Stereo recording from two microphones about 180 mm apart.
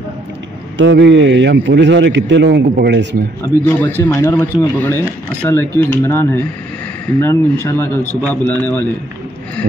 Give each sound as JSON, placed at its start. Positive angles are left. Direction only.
{"t": 0.7, "sound": "a man's voice", "side_deg": -80}
{"t": 2.7, "sound": "a man's voice", "side_deg": -70}
{"t": 3.6, "sound": "speech", "side_deg": 10}